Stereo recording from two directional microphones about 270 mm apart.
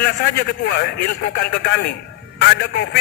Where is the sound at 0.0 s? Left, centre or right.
Left.